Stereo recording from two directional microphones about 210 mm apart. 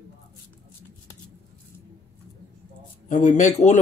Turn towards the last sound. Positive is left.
turn(degrees=35)  # may be behind; listen again after turning